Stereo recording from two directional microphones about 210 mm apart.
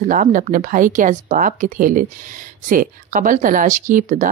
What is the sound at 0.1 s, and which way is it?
Speech, 40° right (ahead or behind).